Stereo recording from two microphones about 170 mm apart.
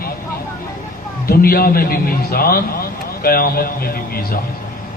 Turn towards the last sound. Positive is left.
turn(degrees=60)  # may be behind; listen again after turning